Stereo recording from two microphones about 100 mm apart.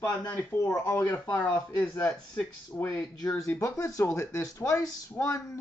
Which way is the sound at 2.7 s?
30° left (ahead or behind).